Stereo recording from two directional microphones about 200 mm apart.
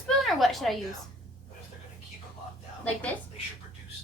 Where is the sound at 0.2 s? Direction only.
Centre (ahead or behind).